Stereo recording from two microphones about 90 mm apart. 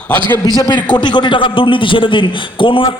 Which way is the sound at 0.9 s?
55° left (ahead or behind).